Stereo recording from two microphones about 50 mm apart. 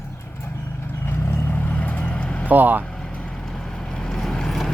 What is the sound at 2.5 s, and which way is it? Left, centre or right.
Speech, right.